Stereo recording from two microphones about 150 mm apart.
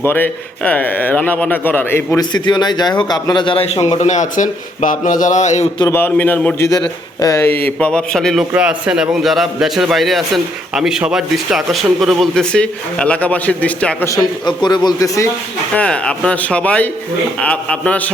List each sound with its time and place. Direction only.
0.0 s a man's voice: 15° left (ahead or behind)
2.3 s a man's voice: 30° left (ahead or behind); by 5.6 s 50° left (ahead or behind)
5.9 s a man's voice: 10° left (ahead or behind)
7.2 s a man's voice: 20° left (ahead or behind)
14.4 s a man's voice: 30° left (ahead or behind)
15.7 s a man's voice: 5° left (ahead or behind)